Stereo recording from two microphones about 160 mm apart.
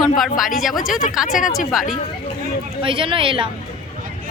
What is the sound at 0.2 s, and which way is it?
Speech, centre (ahead or behind).